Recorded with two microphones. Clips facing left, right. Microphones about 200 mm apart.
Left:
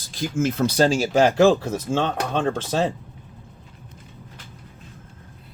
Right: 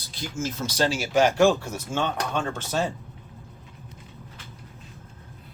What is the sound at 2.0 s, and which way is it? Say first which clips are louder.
Speech: left 1 dB; 35° left (ahead or behind).